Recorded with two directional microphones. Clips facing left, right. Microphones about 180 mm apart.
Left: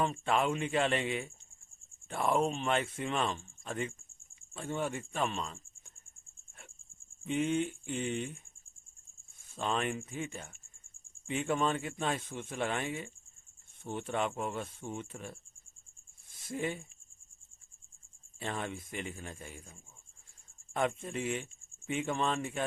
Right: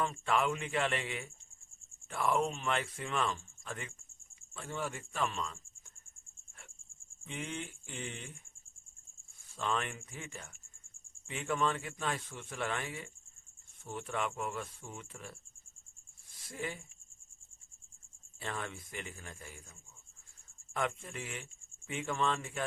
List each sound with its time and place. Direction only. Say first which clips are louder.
0.0 s speech: left 2 dB; 25° left (ahead or behind)
7.3 s speech: left 11 dB; 20° left (ahead or behind)
9.6 s speech: left 3 dB; 20° left (ahead or behind)
18.3 s speech: left 3 dB; 20° left (ahead or behind)
20.7 s speech: left 4 dB; 25° left (ahead or behind)